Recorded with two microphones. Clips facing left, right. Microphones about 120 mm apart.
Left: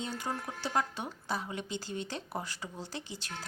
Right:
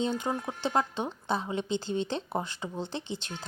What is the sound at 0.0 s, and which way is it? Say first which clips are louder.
Speech: right 7 dB; 20° right (ahead or behind).